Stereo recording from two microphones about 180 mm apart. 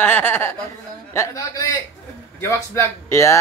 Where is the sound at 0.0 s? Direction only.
10° left (ahead or behind).